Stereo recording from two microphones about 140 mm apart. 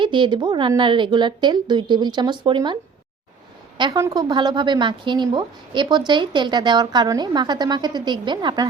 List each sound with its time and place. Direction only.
0.0 s a woman's voice: 35° right (ahead or behind)
3.8 s a woman's voice: 35° right (ahead or behind)